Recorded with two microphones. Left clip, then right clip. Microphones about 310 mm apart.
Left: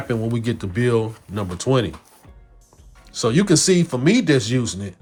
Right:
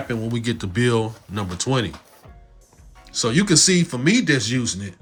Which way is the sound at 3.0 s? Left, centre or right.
Centre.